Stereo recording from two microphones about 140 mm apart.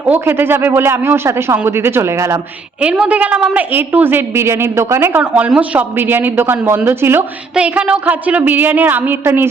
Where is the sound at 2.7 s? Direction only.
10° right (ahead or behind).